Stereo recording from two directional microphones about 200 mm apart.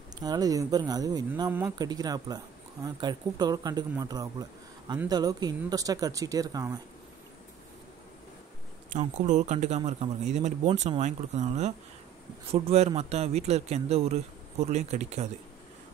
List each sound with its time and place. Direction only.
0.2 s speech: 20° right (ahead or behind)
8.9 s speech: 35° right (ahead or behind)